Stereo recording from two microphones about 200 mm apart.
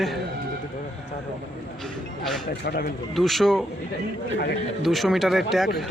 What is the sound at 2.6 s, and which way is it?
Speech, 50° left (ahead or behind).